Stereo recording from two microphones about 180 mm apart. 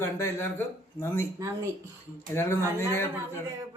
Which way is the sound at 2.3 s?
15° left (ahead or behind).